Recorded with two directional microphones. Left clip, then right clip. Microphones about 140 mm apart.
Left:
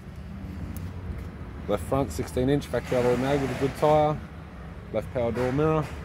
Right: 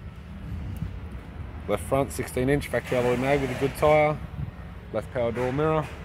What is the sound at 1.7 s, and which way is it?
Speech, 10° right (ahead or behind).